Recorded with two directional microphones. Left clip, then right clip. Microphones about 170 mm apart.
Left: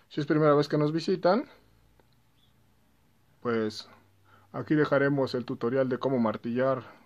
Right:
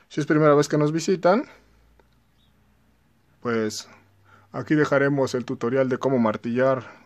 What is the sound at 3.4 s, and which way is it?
Speech, 10° right (ahead or behind).